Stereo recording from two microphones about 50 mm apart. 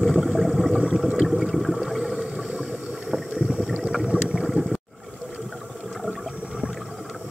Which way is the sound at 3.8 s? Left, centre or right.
Centre.